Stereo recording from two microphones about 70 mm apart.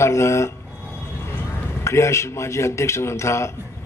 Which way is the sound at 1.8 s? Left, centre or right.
Left.